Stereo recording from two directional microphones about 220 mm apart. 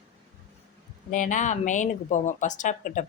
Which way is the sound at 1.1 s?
35° left (ahead or behind).